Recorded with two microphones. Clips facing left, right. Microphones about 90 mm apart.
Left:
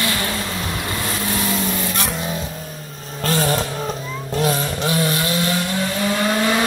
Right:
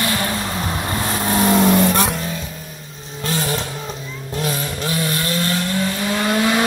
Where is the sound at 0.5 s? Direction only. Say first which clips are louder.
Right 2 dB; 30° right (ahead or behind).